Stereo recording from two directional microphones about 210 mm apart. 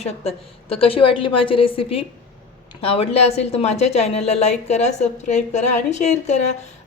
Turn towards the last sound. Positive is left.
turn(degrees=35)  # may be behind; listen again after turning